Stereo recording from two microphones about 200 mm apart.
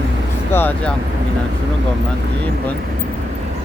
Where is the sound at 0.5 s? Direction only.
10° left (ahead or behind).